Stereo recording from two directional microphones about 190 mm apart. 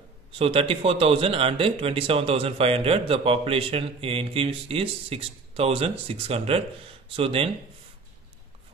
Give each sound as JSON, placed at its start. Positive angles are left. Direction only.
{"t": 0.4, "sound": "a man's voice", "side_deg": -30}